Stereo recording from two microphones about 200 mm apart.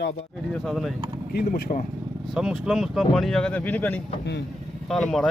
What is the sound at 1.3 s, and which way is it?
Speech, 50° left (ahead or behind).